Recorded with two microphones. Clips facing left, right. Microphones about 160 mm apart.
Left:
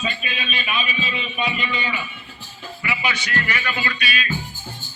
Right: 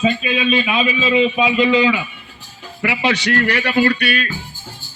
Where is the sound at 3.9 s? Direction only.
60° right (ahead or behind).